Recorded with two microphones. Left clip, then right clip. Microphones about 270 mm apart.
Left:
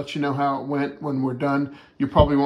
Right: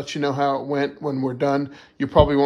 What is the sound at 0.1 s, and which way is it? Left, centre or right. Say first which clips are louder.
Speech: right 2 dB; centre.